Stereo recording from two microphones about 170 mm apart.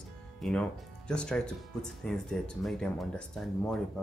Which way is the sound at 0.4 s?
5° left (ahead or behind).